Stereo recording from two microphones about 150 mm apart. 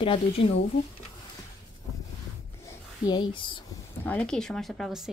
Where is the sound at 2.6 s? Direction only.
30° left (ahead or behind).